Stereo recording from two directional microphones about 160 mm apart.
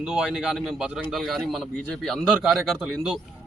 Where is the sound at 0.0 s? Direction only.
5° right (ahead or behind).